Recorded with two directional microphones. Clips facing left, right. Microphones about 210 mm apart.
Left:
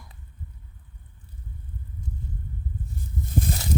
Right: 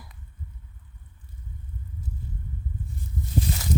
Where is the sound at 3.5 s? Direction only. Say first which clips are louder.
Left 1 dB; 45° left (ahead or behind).